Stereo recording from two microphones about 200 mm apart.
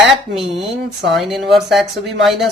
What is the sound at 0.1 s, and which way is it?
Speech, centre (ahead or behind).